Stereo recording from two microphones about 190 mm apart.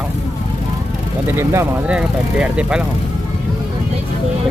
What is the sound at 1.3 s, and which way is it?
Speech, 15° right (ahead or behind).